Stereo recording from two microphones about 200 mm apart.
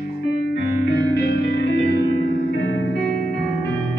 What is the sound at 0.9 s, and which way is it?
Music, 60° left (ahead or behind).